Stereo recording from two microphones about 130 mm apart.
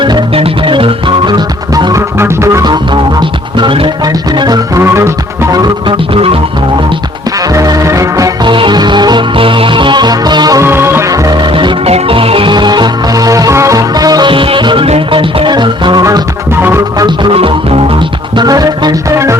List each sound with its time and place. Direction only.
0.0 s music: 40° right (ahead or behind); by 2.7 s 25° right (ahead or behind)
2.9 s music: 35° right (ahead or behind)
4.8 s music: 20° right (ahead or behind)
7.4 s music: 25° right (ahead or behind)
8.4 s music: 35° right (ahead or behind)
10.6 s music: 20° right (ahead or behind)
11.5 s music: 40° right (ahead or behind)
16.6 s music: 15° right (ahead or behind)
17.0 s music: 40° right (ahead or behind)
18.3 s music: 30° right (ahead or behind)